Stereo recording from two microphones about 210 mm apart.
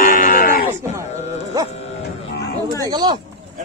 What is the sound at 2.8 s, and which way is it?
Speech, 20° right (ahead or behind).